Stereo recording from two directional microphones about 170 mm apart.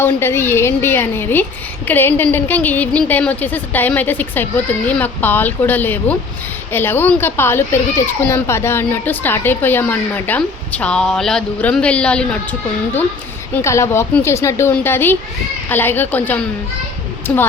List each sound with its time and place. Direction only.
0.0 s a child's voice: 15° left (ahead or behind)
13.6 s a child's voice: 15° left (ahead or behind)